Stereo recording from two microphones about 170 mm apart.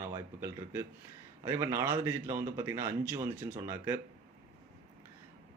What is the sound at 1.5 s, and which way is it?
Speech, 15° right (ahead or behind).